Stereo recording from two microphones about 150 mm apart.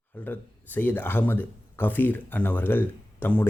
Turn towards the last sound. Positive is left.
turn(degrees=10)  # may be behind; listen again after turning